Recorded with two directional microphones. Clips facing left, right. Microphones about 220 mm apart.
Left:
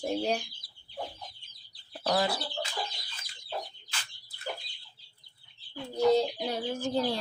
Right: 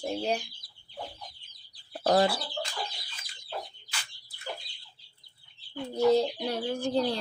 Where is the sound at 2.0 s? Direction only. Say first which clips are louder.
Right 5 dB; 35° right (ahead or behind).